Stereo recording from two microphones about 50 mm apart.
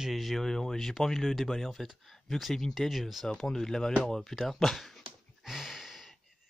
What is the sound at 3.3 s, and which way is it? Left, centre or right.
Speech, centre.